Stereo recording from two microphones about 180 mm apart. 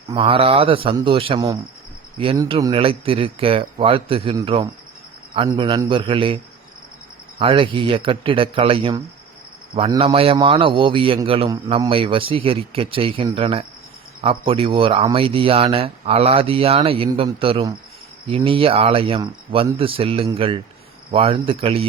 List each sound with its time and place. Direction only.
0.1 s a man's voice: 30° right (ahead or behind)
2.1 s cricket: 30° right (ahead or behind)
2.5 s a man's voice: 20° right (ahead or behind)